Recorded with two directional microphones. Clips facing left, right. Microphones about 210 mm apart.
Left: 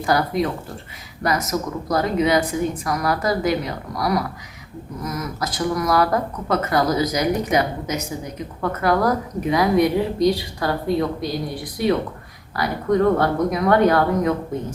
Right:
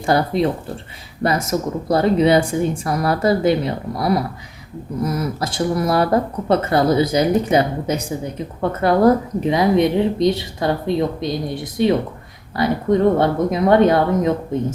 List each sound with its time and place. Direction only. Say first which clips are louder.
0.0 s speech: right 3 dB; 25° right (ahead or behind)